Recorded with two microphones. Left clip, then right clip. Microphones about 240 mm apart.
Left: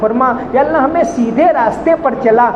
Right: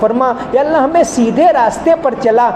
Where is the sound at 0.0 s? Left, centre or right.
Right.